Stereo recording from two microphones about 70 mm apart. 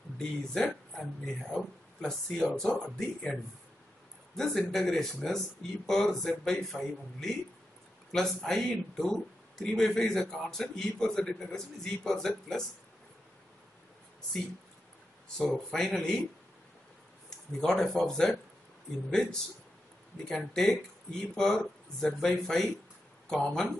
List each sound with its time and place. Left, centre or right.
0.2 s speech: centre
4.4 s speech: centre
15.3 s speech: centre
17.5 s speech: centre
20.2 s speech: centre